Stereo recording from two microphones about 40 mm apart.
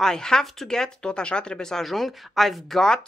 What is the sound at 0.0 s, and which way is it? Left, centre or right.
Speech, centre.